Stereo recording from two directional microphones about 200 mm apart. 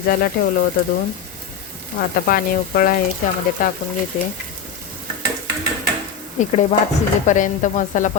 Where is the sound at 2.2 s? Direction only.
45° left (ahead or behind).